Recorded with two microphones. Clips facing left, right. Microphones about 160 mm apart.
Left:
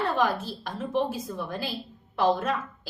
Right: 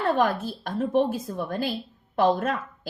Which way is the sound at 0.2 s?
50° right (ahead or behind).